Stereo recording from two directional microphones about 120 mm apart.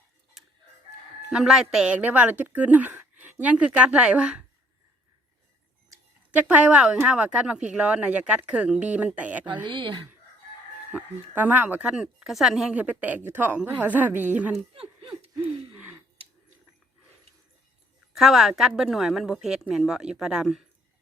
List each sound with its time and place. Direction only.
0.4 s crowing: 5° right (ahead or behind)
1.3 s speech: 5° right (ahead or behind)
6.3 s speech: 10° right (ahead or behind)
9.6 s speech: 45° right (ahead or behind)
10.9 s speech: 15° right (ahead or behind)
14.8 s speech: 55° right (ahead or behind)
18.1 s a woman's voice: centre (ahead or behind)